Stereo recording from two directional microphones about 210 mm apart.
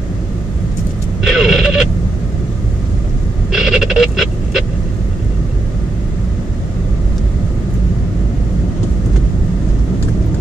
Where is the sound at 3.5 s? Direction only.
Centre (ahead or behind).